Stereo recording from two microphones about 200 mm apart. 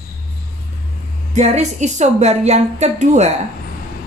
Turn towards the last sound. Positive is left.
turn(degrees=-35)  # may be behind; listen again after turning